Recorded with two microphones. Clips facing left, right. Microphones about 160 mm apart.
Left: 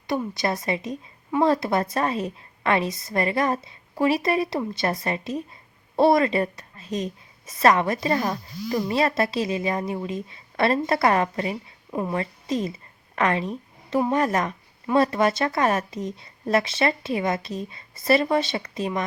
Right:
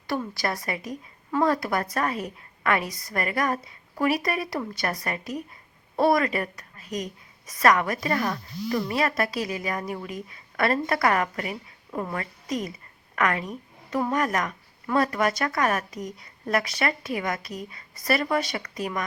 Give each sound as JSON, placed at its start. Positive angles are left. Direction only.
{"t": 0.1, "sound": "a woman's voice", "side_deg": 20}